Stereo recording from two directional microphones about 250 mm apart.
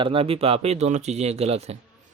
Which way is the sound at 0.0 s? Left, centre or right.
Right.